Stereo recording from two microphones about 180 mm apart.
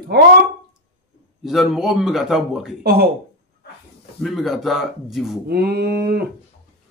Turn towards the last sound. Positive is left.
turn(degrees=-65)  # may be behind; listen again after turning